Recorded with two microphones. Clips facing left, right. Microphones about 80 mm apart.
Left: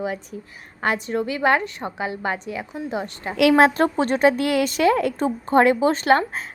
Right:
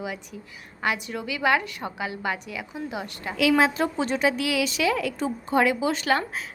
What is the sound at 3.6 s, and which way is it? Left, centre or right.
A woman's voice, left.